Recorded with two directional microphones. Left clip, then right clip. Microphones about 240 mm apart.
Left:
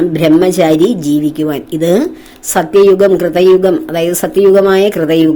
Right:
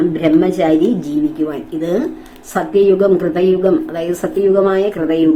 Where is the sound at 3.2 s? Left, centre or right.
Left.